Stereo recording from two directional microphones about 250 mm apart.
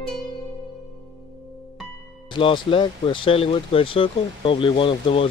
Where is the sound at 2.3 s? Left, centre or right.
Left.